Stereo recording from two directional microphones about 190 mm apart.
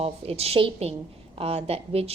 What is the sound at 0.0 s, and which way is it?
A woman's voice, 30° right (ahead or behind).